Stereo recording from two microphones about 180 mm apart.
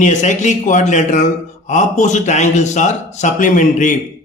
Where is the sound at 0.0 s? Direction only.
45° left (ahead or behind).